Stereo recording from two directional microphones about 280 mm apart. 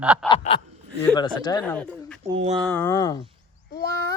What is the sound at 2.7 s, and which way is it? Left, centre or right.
Speech, centre.